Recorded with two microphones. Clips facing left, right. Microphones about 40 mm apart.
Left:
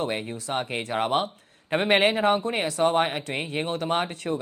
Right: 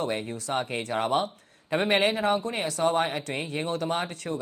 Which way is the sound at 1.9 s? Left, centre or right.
Left.